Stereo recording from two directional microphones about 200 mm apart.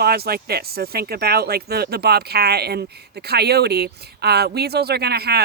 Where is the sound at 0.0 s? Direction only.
50° right (ahead or behind).